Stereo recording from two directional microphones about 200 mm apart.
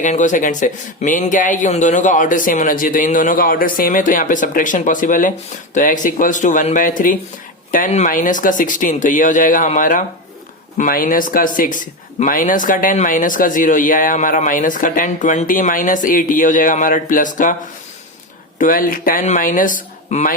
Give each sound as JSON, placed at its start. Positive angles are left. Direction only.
{"t": 0.0, "sound": "speech", "side_deg": 40}
{"t": 18.6, "sound": "speech", "side_deg": 45}